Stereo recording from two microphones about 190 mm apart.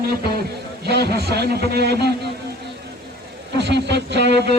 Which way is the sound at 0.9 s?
60° right (ahead or behind).